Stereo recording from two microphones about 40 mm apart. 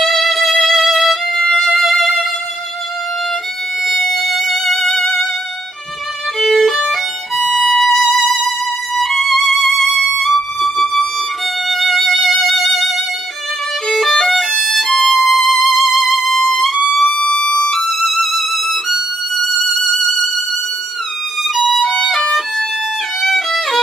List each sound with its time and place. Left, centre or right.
0.0 s music: centre
3.8 s violin: centre
6.4 s violin: centre
11.7 s music: centre
13.8 s violin: centre
15.7 s music: centre
17.3 s music: left
17.6 s music: centre
21.5 s violin: centre
23.2 s violin: centre